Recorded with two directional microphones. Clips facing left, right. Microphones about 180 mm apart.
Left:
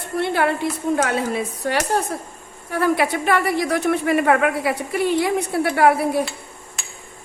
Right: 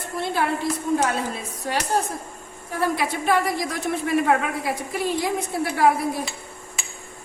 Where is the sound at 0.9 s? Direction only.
65° left (ahead or behind).